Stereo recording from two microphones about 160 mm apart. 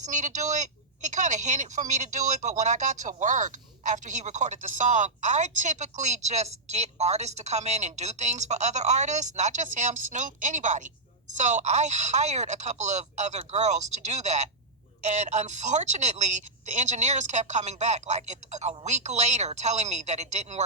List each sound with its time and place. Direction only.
0.0 s speech: 50° right (ahead or behind)